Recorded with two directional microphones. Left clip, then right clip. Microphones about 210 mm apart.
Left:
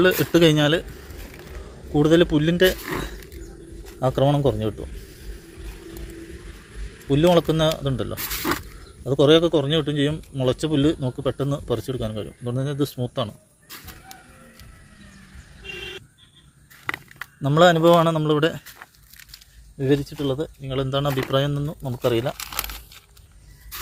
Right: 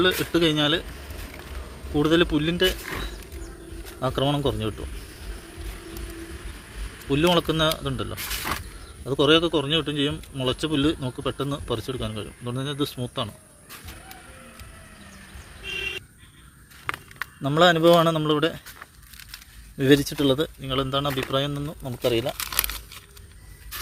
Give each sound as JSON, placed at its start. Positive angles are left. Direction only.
{"t": 0.0, "sound": "speech", "side_deg": 25}
{"t": 1.9, "sound": "speech", "side_deg": 15}
{"t": 7.1, "sound": "speech", "side_deg": 10}
{"t": 8.5, "sound": "speech", "side_deg": 25}
{"t": 9.0, "sound": "speech", "side_deg": 15}
{"t": 17.4, "sound": "a man's voice", "side_deg": 10}
{"t": 19.8, "sound": "speech", "side_deg": -35}
{"t": 20.6, "sound": "speech", "side_deg": -10}
{"t": 20.9, "sound": "speech", "side_deg": 10}
{"t": 22.4, "sound": "crumpling", "side_deg": -5}